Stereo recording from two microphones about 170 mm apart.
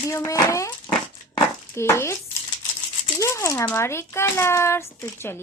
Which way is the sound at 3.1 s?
15° left (ahead or behind).